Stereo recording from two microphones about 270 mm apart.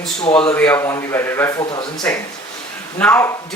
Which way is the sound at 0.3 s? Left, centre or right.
Centre.